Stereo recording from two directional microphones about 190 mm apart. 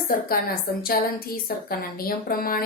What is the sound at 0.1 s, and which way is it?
Speech, 50° left (ahead or behind).